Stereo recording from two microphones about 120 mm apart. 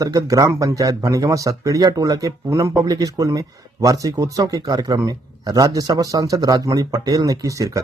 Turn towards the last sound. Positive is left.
turn(degrees=-25)  # may be behind; listen again after turning